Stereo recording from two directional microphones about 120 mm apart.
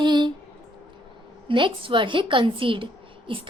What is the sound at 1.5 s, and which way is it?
A woman's voice, 45° right (ahead or behind).